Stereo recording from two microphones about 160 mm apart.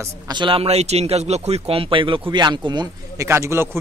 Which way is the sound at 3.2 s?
15° right (ahead or behind).